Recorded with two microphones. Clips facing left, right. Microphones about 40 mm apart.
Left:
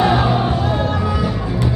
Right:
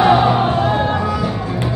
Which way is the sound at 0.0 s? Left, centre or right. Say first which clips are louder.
Right 3 dB; centre.